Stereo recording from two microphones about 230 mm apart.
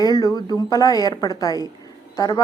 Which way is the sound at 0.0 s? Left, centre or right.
Centre.